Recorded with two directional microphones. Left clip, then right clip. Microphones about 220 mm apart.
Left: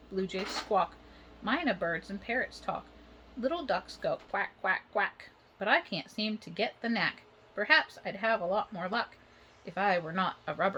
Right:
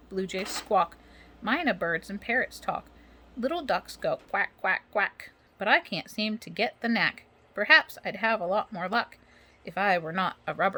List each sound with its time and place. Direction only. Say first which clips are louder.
0.1 s speech: right 2 dB; 25° right (ahead or behind)